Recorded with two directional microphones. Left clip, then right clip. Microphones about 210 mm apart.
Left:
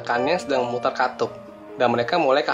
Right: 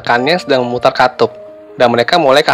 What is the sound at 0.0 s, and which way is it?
Speech, 30° right (ahead or behind).